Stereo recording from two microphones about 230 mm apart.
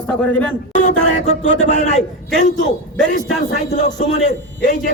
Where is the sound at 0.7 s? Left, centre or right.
Left.